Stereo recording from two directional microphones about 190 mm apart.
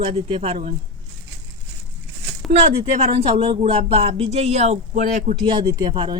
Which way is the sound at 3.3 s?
35° right (ahead or behind).